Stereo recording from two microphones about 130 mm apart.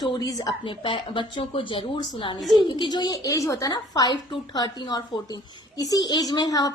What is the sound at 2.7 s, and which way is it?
A woman's voice, 35° left (ahead or behind).